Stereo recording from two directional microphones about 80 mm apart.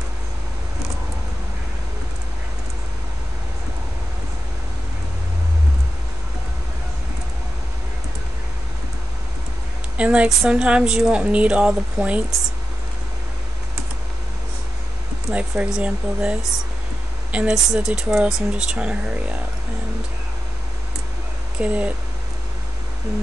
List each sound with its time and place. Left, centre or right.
9.9 s a woman's voice: centre
15.3 s a woman's voice: centre
21.5 s a woman's voice: centre